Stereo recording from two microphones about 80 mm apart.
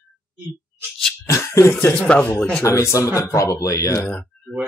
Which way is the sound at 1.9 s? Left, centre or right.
Centre.